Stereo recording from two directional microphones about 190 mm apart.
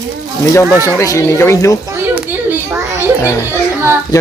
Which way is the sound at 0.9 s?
15° left (ahead or behind).